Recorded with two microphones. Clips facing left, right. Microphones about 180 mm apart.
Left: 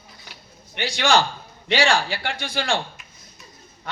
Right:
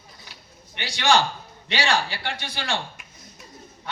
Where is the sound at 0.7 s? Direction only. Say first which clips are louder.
Left 1 dB; 50° left (ahead or behind).